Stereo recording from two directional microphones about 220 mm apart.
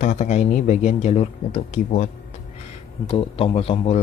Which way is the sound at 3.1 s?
25° left (ahead or behind).